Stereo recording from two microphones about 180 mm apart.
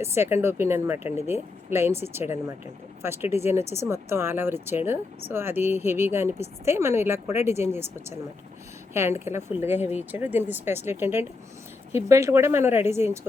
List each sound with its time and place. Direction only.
0.0 s speech: 15° right (ahead or behind)